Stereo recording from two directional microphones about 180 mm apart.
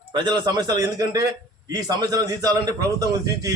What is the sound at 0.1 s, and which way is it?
A man's voice, 25° right (ahead or behind).